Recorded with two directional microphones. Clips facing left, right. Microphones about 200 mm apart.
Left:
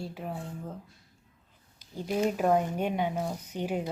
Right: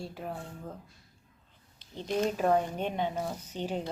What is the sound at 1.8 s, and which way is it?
Speech, 10° left (ahead or behind).